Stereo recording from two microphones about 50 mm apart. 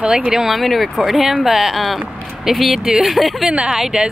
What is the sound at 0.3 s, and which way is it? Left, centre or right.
Speech, centre.